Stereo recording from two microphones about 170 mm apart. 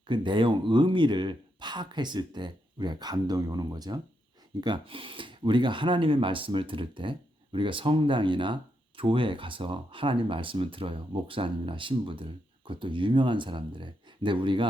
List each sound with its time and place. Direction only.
0.1 s speech: 30° right (ahead or behind)